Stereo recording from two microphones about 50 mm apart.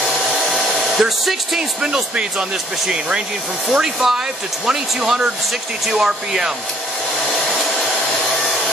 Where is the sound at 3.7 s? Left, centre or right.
Centre.